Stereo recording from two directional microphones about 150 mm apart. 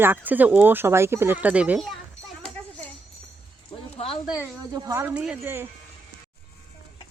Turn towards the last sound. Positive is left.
turn(degrees=-15)  # may be behind; listen again after turning